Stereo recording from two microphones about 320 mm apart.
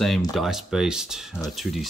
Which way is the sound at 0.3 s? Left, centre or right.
Centre.